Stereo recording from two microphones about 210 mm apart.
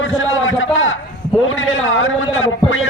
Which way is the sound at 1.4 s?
70° left (ahead or behind).